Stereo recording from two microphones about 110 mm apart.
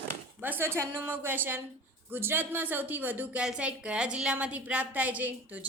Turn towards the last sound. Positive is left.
turn(degrees=-15)  # may be behind; listen again after turning